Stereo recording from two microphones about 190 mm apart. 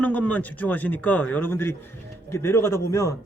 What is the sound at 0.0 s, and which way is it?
Speech, 10° left (ahead or behind).